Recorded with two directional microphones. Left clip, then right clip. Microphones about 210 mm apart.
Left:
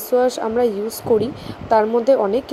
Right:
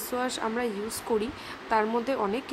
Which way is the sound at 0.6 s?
10° left (ahead or behind).